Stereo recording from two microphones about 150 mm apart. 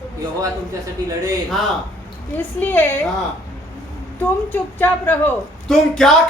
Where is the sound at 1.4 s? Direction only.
Centre (ahead or behind).